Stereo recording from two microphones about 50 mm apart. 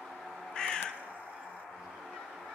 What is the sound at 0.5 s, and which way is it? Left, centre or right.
Crow, centre.